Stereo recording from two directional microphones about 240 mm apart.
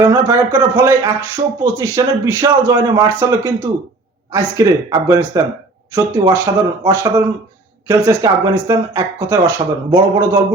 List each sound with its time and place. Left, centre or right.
0.0 s speech: centre